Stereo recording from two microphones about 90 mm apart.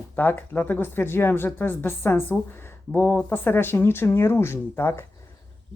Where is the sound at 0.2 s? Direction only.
20° left (ahead or behind).